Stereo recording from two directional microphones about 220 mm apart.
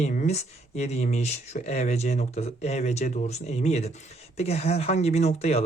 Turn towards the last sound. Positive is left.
turn(degrees=30)  # may be behind; listen again after turning